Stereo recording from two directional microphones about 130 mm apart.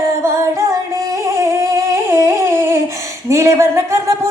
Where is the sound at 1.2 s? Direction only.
20° right (ahead or behind).